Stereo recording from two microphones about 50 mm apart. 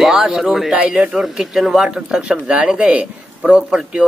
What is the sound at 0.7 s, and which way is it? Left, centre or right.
Speech, right.